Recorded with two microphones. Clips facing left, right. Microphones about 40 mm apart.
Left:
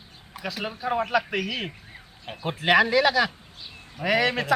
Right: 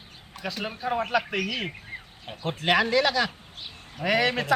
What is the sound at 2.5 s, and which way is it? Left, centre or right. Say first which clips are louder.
Speech: left 3 dB; centre.